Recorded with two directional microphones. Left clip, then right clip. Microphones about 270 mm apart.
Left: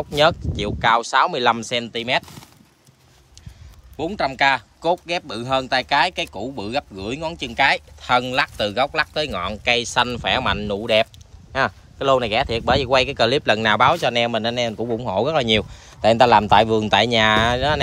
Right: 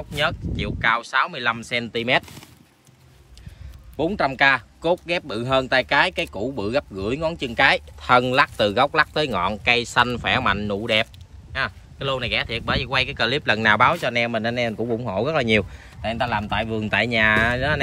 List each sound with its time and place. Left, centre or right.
0.1 s speech: centre
3.9 s speech: centre
11.5 s speech: centre
16.0 s speech: left